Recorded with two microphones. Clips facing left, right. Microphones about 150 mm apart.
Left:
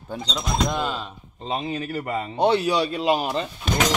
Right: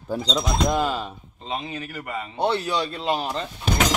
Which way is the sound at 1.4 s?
30° left (ahead or behind).